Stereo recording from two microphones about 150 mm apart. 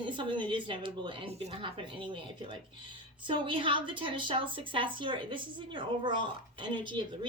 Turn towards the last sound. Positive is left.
turn(degrees=-30)  # may be behind; listen again after turning